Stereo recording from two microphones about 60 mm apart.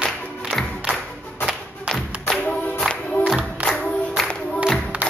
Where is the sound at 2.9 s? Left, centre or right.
Left.